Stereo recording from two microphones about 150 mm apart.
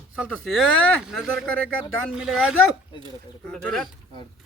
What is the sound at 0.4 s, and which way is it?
Speech, 5° left (ahead or behind).